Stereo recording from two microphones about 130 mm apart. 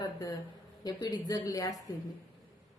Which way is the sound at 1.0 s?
30° left (ahead or behind).